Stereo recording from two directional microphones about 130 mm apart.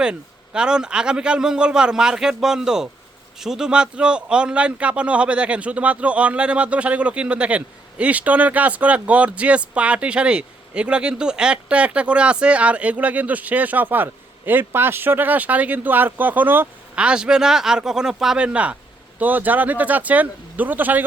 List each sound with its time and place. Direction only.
0.0 s a man's voice: 5° right (ahead or behind)